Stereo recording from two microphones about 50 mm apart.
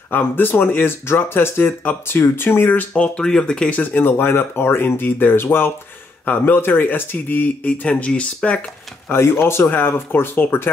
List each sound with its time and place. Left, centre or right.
0.1 s speech: left
2.9 s speech: left
3.7 s speech: left
4.2 s speech: left
7.6 s speech: left
9.1 s speech: left